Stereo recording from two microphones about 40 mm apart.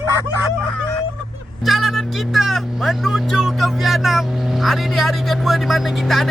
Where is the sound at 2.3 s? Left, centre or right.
Centre.